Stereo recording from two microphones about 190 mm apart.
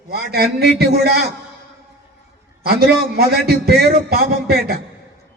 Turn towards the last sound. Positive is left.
turn(degrees=-55)  # may be behind; listen again after turning